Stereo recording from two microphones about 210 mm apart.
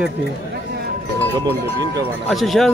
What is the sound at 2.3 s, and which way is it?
Speech, centre (ahead or behind).